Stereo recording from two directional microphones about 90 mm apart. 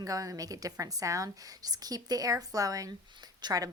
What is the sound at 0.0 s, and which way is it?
A woman's voice, 40° right (ahead or behind).